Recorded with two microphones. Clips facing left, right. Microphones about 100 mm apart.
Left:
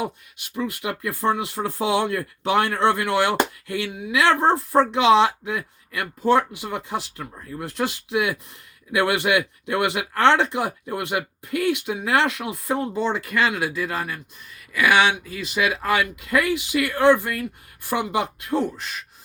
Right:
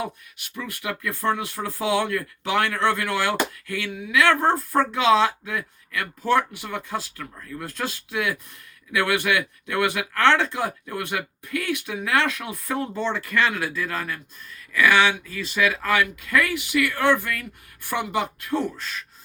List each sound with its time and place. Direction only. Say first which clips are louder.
0.5 s speech: left 4 dB; 25° left (ahead or behind)
7.7 s speech: left 7 dB; 20° left (ahead or behind)